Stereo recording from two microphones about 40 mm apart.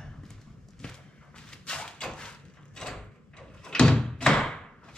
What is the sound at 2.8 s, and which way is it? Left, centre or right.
Door, centre.